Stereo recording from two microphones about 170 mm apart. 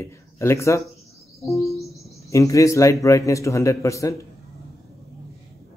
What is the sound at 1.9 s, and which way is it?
Cricket, 20° left (ahead or behind).